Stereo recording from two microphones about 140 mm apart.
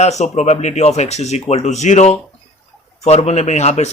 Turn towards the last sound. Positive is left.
turn(degrees=55)  # may be behind; listen again after turning